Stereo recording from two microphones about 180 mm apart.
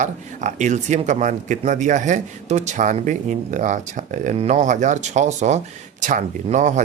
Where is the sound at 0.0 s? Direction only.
40° right (ahead or behind).